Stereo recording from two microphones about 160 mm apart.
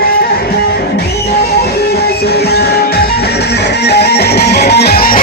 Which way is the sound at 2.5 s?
80° left.